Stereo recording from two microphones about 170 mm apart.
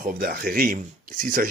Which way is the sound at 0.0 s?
55° right (ahead or behind).